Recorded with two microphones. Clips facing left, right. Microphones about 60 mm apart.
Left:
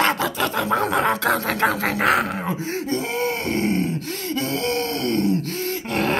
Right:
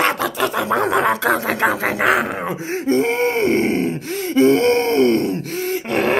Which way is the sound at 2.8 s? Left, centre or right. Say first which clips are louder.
Right 8 dB; right.